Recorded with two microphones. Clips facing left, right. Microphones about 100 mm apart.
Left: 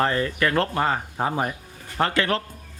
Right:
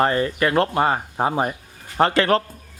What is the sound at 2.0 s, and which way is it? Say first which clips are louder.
Speech: right 5 dB; 30° right (ahead or behind).